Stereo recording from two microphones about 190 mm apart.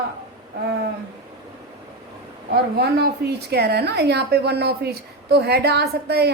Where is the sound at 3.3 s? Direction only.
60° right (ahead or behind).